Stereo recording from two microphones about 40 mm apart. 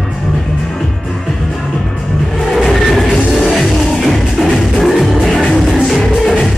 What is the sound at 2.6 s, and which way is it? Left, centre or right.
Music, centre.